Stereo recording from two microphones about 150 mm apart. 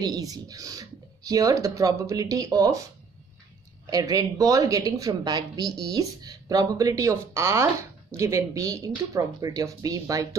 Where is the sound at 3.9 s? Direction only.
25° right (ahead or behind).